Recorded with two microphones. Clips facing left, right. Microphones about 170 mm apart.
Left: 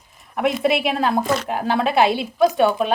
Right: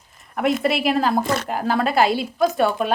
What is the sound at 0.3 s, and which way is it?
Speech, centre (ahead or behind).